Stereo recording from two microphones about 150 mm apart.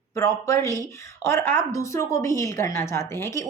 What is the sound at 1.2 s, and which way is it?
A woman's voice, 20° left (ahead or behind).